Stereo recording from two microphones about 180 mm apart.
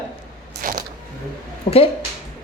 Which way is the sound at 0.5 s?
50° right (ahead or behind).